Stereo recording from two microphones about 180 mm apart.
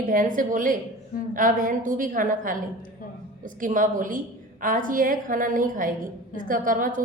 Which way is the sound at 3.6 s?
50° right (ahead or behind).